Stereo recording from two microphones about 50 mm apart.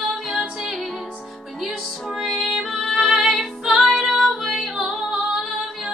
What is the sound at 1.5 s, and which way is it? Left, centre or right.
Music, centre.